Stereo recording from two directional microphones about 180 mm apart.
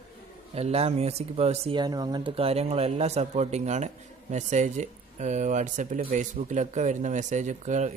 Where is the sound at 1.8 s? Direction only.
20° right (ahead or behind).